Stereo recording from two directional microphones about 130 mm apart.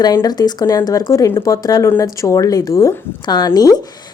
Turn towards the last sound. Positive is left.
turn(degrees=30)  # may be behind; listen again after turning